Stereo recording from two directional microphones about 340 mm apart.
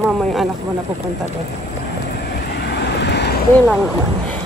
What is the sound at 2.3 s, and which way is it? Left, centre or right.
Vehicle, left.